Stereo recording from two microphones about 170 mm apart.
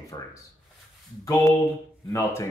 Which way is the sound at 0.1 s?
25° left (ahead or behind).